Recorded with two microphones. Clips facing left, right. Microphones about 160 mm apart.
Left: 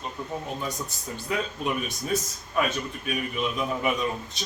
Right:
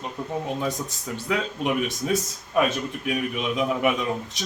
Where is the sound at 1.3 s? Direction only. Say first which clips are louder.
Right 3 dB; 85° right.